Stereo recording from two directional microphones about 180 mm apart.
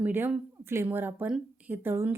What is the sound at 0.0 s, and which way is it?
A woman's voice, 10° right (ahead or behind).